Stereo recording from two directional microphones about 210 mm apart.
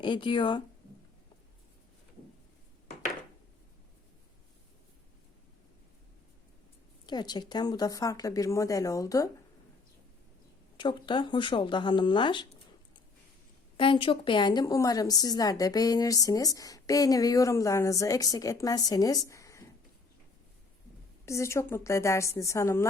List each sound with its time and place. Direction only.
0.0 s speech: 25° left (ahead or behind)
7.0 s a woman's voice: 20° left (ahead or behind)
10.8 s speech: 20° left (ahead or behind)
13.7 s a woman's voice: 25° left (ahead or behind)
21.2 s a woman's voice: 15° left (ahead or behind)